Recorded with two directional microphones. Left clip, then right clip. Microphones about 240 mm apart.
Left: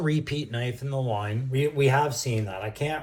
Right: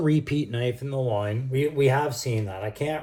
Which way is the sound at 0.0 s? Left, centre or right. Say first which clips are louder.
Right 4 dB; right.